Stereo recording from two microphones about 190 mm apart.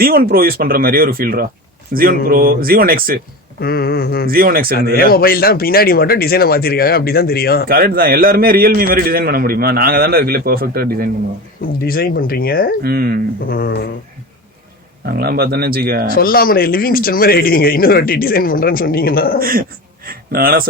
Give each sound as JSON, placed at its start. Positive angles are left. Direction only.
{"t": 0.0, "sound": "a man's voice", "side_deg": -50}
{"t": 3.6, "sound": "a sound", "side_deg": 55}
{"t": 4.3, "sound": "a man's voice", "side_deg": -50}
{"t": 4.9, "sound": "a man's voice", "side_deg": 50}
{"t": 7.7, "sound": "a man's voice", "side_deg": -50}
{"t": 11.9, "sound": "a man's voice", "side_deg": 50}
{"t": 12.8, "sound": "a man's voice", "side_deg": -55}
{"t": 13.5, "sound": "a sound", "side_deg": 55}
{"t": 15.0, "sound": "a man's voice", "side_deg": -55}
{"t": 16.0, "sound": "a man's voice", "side_deg": 50}
{"t": 19.4, "sound": "a man's voice", "side_deg": -50}